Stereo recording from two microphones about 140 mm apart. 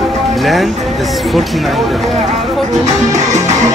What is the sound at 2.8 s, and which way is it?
Speech, 55° right (ahead or behind).